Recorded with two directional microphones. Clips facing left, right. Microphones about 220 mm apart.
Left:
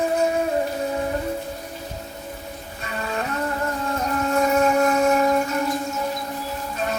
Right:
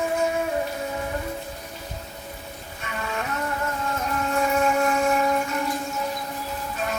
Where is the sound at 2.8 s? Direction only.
35° left (ahead or behind).